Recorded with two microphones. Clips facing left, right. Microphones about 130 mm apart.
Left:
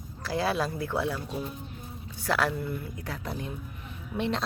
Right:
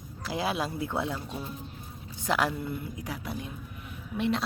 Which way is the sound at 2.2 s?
15° right (ahead or behind).